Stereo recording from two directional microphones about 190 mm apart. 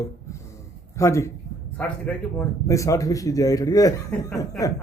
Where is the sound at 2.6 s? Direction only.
15° left (ahead or behind).